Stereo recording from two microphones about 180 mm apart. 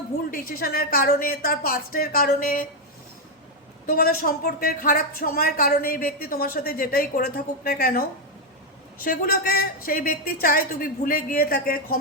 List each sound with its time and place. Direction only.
0.3 s a woman's voice: 55° left (ahead or behind)
3.8 s speech: 55° left (ahead or behind)
9.0 s a woman's voice: 55° left (ahead or behind)